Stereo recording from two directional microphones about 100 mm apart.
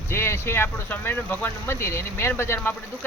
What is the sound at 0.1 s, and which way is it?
Speech, 25° left (ahead or behind).